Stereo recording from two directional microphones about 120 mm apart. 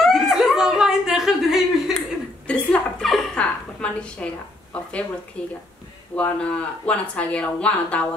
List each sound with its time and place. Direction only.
0.0 s chuckle: centre (ahead or behind)
2.4 s a sound: 10° left (ahead or behind)
3.8 s a woman's voice: 10° left (ahead or behind)
5.4 s speech: 10° left (ahead or behind)